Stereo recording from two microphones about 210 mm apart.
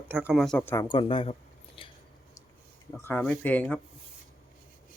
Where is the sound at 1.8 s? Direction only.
25° left (ahead or behind).